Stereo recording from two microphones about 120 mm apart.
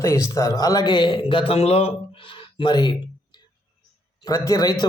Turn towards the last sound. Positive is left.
turn(degrees=35)  # may be behind; listen again after turning